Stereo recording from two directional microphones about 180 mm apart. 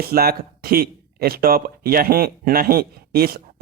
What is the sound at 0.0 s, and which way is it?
Speech, 55° right (ahead or behind).